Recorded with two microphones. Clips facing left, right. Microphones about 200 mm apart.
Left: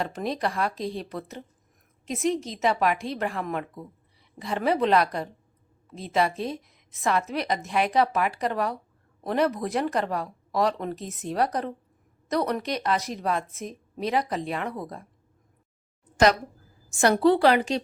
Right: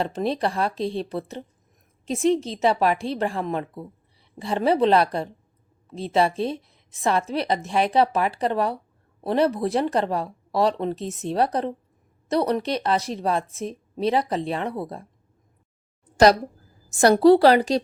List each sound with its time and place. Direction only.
0.0 s a woman's voice: 30° right (ahead or behind)
16.1 s a woman's voice: 35° right (ahead or behind)